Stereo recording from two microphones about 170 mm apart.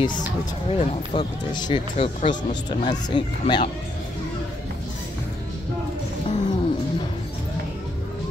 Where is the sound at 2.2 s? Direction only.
45° left (ahead or behind).